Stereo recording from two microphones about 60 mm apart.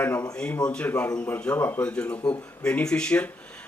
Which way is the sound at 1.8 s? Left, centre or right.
Centre.